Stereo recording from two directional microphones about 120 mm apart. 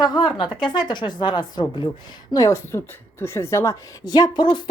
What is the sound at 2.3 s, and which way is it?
A woman's voice, 25° left (ahead or behind).